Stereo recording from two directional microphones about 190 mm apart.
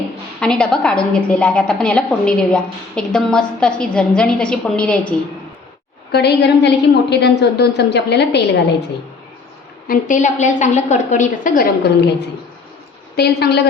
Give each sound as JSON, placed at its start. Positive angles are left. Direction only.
{"t": 0.3, "sound": "a woman's voice", "side_deg": 5}
{"t": 6.1, "sound": "a woman's voice", "side_deg": 60}
{"t": 9.8, "sound": "a woman's voice", "side_deg": 45}
{"t": 13.1, "sound": "a woman's voice", "side_deg": 60}